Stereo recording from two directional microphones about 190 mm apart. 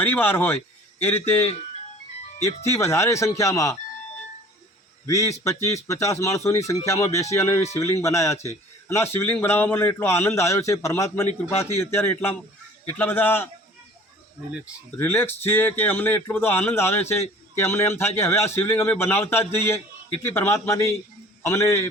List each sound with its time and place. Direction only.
0.0 s a man's voice: 10° left (ahead or behind)
2.7 s a man's voice: 15° left (ahead or behind)
5.0 s a man's voice: 15° left (ahead or behind)
14.9 s a man's voice: 10° left (ahead or behind)